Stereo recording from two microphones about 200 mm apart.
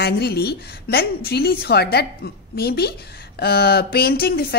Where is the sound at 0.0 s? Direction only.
50° left (ahead or behind).